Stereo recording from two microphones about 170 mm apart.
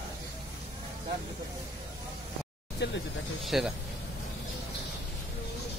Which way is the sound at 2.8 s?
90° left.